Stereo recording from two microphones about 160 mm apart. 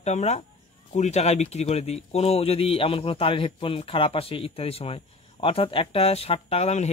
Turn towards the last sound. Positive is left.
turn(degrees=40)  # may be behind; listen again after turning